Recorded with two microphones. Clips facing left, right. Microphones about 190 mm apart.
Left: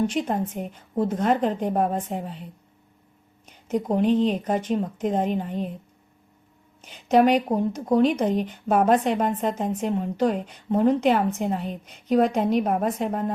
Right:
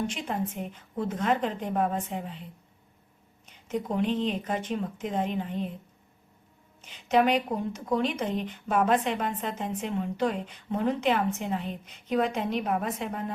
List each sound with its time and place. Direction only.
0.1 s a woman's voice: 40° left (ahead or behind)
3.7 s speech: 40° left (ahead or behind)
6.8 s speech: 45° left (ahead or behind)